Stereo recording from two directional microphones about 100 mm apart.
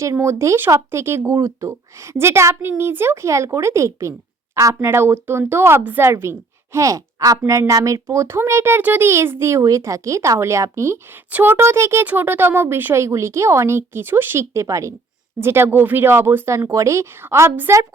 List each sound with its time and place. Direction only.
0.0 s speech: 30° right (ahead or behind)
11.3 s speech: 20° right (ahead or behind)